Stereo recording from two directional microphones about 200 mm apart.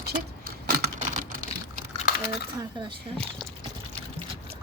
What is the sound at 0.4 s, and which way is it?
Computer keyboard, 45° right (ahead or behind).